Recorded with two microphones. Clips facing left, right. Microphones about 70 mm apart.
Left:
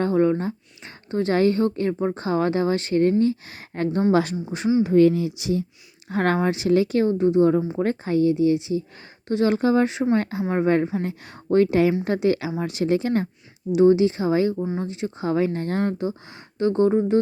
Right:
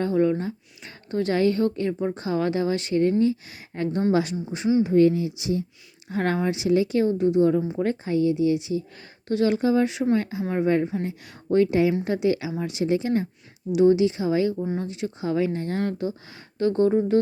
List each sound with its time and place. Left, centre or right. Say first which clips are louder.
0.0 s a sound: left 2 dB; left
1.1 s a woman's voice: left 2 dB; left
4.8 s speech: left 2 dB; left
6.1 s a woman's voice: left 3 dB; left
7.2 s a woman's voice: left 3 dB; left
9.6 s a woman's voice: left 2 dB; left
9.9 s a woman's voice: left 1 dB; left
10.2 s a woman's voice: left 2 dB; left
13.7 s a woman's voice: left 2 dB; left
15.8 s a woman's voice: left 2 dB; left